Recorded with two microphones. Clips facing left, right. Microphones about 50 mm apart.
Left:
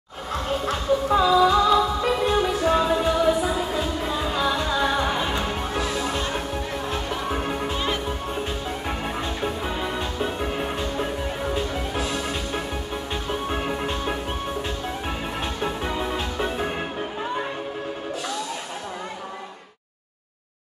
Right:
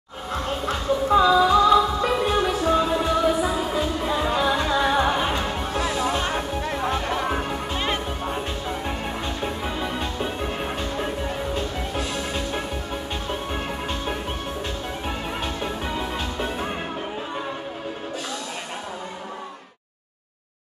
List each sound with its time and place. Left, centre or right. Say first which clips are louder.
1.0 s music: right 2 dB; centre
4.2 s music: right 2 dB; right
7.4 s music: left 2 dB; centre
7.7 s music: even; right
8.8 s music: even; centre